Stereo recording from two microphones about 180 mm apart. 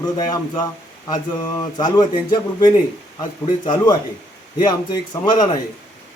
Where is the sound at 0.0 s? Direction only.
20° left (ahead or behind).